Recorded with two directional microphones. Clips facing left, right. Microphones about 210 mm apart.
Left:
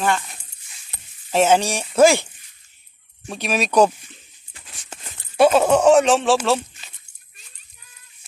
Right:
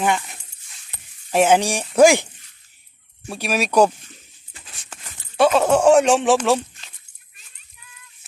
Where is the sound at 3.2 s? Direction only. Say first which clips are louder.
Even; 10° right (ahead or behind).